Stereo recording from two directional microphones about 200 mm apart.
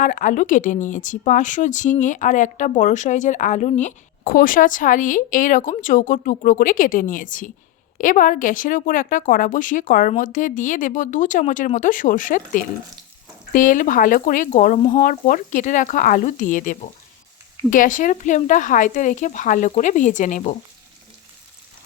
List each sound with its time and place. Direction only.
0.0 s speech: 40° left (ahead or behind)
14.8 s speech: 30° left (ahead or behind)
15.0 s speech: 40° left (ahead or behind)